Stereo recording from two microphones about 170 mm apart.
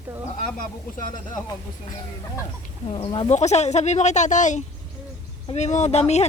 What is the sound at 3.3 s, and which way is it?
Speech, 40° left (ahead or behind).